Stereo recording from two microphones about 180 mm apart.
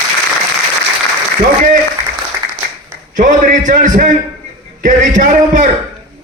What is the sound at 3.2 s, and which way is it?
Speech, 45° right (ahead or behind).